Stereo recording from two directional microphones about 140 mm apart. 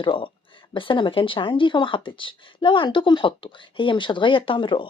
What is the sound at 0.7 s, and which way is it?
A woman's voice, 35° left (ahead or behind).